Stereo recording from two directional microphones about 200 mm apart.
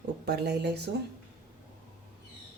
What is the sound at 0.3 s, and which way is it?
Speech, 55° right (ahead or behind).